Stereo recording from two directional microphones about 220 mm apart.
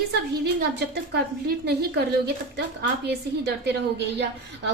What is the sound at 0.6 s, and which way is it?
A woman's voice, 50° right (ahead or behind).